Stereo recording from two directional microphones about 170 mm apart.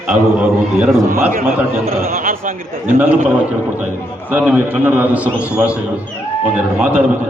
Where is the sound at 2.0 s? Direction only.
55° right (ahead or behind).